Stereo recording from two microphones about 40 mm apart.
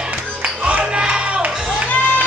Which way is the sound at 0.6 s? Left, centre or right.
Right.